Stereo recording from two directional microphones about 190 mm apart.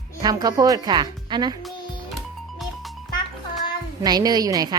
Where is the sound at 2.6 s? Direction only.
Centre (ahead or behind).